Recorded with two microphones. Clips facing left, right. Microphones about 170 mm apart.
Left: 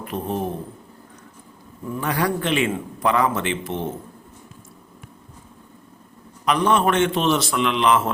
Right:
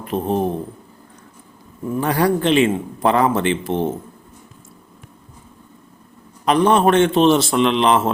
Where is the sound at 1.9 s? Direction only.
40° right (ahead or behind).